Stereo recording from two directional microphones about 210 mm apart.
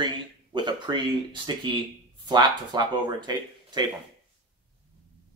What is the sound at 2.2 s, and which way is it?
Speech, 20° right (ahead or behind).